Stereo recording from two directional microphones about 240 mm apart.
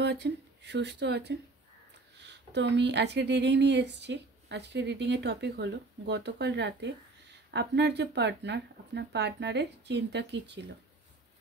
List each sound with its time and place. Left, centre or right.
0.0 s speech: right